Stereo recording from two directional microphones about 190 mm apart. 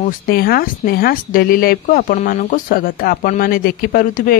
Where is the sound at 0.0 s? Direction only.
50° left (ahead or behind).